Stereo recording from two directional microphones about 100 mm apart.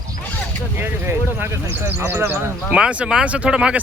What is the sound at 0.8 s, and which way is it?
Speech, 20° right (ahead or behind).